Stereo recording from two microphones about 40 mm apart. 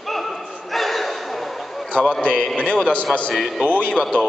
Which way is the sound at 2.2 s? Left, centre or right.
Left.